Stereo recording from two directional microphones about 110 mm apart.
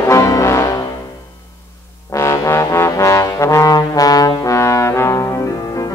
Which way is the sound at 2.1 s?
25° left (ahead or behind).